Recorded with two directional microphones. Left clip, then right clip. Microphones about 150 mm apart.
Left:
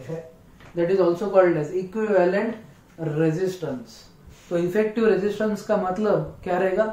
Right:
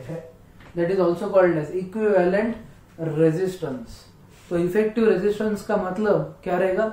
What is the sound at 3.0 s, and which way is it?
Speech, 10° left (ahead or behind).